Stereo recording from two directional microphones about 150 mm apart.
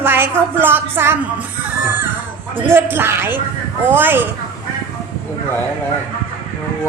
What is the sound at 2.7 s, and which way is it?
A woman's voice, 15° right (ahead or behind).